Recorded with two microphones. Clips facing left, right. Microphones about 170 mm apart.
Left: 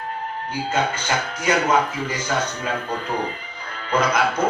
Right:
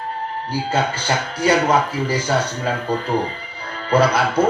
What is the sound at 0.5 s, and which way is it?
Speech, 35° right (ahead or behind).